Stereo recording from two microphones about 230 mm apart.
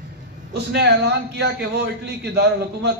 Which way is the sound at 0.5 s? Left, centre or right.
Right.